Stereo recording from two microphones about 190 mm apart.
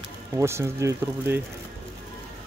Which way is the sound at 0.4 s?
15° right (ahead or behind).